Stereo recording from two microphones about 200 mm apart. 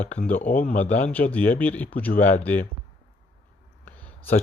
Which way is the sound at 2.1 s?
45° left (ahead or behind).